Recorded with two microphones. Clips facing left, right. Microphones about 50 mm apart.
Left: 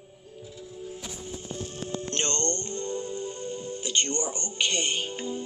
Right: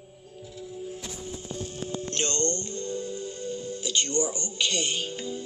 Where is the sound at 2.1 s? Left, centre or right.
Left.